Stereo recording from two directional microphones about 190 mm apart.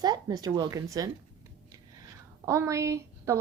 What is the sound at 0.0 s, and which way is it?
Speech, 20° right (ahead or behind).